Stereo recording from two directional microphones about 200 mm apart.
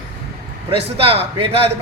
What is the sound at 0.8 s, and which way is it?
Speech, 30° right (ahead or behind).